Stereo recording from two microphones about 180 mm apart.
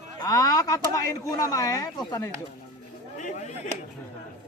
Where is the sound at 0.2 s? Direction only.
20° left (ahead or behind).